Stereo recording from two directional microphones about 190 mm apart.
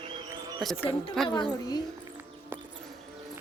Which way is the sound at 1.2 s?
Centre (ahead or behind).